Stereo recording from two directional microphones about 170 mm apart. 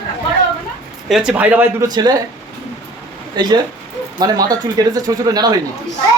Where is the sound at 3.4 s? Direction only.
25° right (ahead or behind).